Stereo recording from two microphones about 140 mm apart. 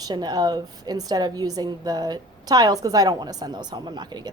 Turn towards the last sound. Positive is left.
turn(degrees=-25)  # may be behind; listen again after turning